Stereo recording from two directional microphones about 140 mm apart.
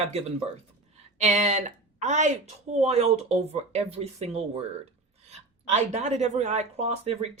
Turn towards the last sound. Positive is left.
turn(degrees=-50)  # may be behind; listen again after turning